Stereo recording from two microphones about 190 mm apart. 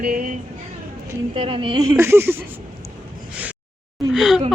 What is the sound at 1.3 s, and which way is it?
Speech, 30° right (ahead or behind).